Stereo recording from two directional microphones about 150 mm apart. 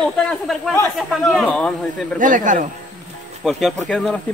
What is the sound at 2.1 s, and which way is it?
Speech, 60° right (ahead or behind).